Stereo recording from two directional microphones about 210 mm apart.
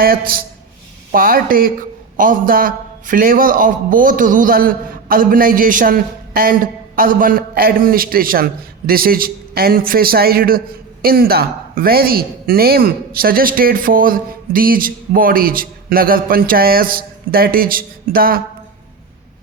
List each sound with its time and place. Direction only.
0.0 s a man's voice: 45° right (ahead or behind)